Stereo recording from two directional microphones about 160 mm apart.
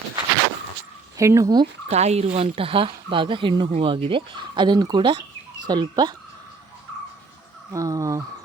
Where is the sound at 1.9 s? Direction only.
40° right (ahead or behind); by 6.1 s 25° right (ahead or behind).